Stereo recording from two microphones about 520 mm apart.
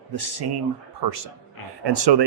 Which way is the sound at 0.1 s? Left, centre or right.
Right.